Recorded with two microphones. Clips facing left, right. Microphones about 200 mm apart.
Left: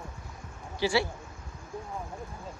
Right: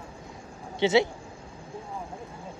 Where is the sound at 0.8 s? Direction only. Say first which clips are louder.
Right 5 dB; 20° right (ahead or behind).